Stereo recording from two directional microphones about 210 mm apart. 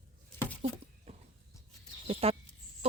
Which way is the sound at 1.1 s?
30° right (ahead or behind).